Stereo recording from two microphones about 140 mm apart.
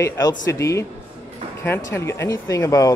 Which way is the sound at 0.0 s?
25° left (ahead or behind).